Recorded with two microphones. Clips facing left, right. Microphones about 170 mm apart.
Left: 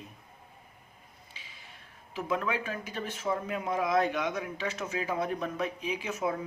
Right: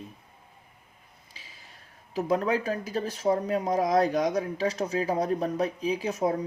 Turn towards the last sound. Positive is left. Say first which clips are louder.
# right 5 dB
turn(degrees=-35)  # may be behind; listen again after turning